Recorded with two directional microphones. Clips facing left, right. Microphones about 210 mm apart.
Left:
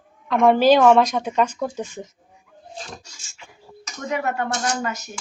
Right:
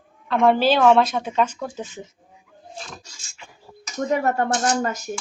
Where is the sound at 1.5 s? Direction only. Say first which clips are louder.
Left 4 dB; 10° left (ahead or behind).